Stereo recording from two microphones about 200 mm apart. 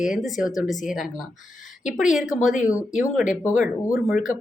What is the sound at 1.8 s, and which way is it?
Speech, 5° right (ahead or behind).